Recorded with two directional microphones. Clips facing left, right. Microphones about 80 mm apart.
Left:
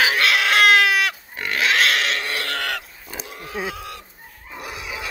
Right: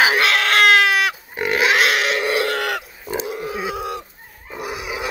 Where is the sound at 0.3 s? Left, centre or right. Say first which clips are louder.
Right 1 dB; centre.